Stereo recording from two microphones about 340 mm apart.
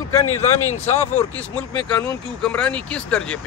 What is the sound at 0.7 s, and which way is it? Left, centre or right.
Speech, centre.